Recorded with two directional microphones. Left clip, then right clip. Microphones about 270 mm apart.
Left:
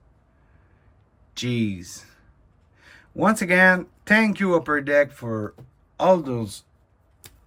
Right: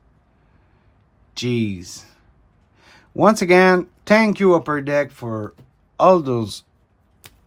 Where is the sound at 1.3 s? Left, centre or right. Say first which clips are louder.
Right 4 dB; centre.